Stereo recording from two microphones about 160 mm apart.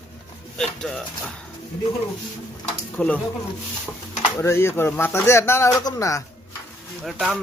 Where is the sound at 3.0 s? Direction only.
10° left (ahead or behind).